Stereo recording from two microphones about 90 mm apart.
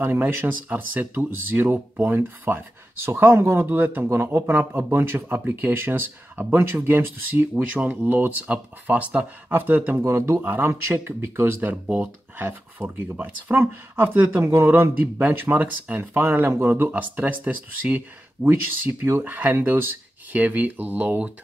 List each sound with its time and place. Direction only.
0.0 s speech: 25° right (ahead or behind)